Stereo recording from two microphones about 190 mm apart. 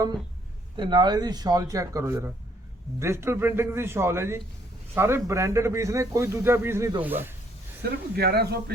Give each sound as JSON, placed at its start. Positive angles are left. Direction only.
{"t": 0.8, "sound": "a man's voice", "side_deg": -25}
{"t": 7.8, "sound": "speech", "side_deg": -55}